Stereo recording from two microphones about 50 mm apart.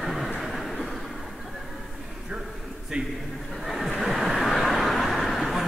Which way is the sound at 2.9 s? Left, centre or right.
Right.